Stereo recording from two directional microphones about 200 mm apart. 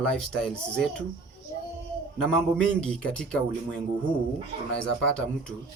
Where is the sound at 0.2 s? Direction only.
5° left (ahead or behind).